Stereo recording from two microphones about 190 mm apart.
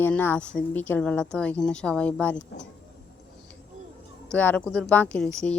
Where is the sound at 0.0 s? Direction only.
10° left (ahead or behind).